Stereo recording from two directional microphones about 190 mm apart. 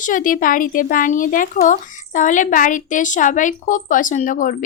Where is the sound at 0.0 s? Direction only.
45° left (ahead or behind).